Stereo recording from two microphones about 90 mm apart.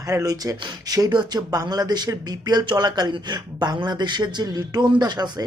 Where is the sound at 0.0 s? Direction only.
40° right (ahead or behind).